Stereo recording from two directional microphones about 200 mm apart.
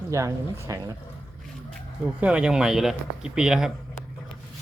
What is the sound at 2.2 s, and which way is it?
Speech, 5° right (ahead or behind).